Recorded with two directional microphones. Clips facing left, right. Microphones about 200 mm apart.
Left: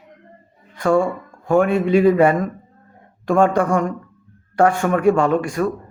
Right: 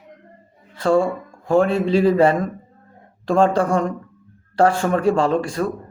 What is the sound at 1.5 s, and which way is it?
A man's voice, 30° right (ahead or behind).